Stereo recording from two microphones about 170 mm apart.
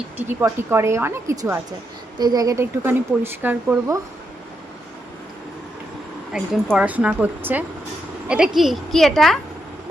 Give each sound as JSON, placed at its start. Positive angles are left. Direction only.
{"t": 0.2, "sound": "a woman's voice", "side_deg": -15}
{"t": 6.3, "sound": "a woman's voice", "side_deg": 0}